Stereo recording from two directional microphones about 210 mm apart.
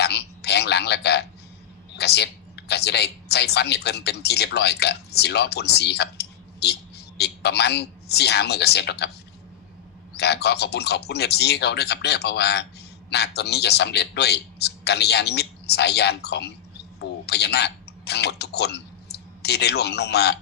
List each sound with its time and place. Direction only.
0.0 s a sound: 50° left (ahead or behind)
2.0 s a woman's voice: 50° left (ahead or behind)
10.2 s speech: 50° left (ahead or behind)